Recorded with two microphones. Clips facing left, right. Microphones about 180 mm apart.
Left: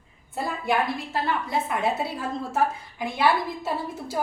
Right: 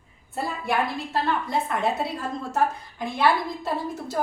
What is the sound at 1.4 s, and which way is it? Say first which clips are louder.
A woman's voice: even; 5° left (ahead or behind).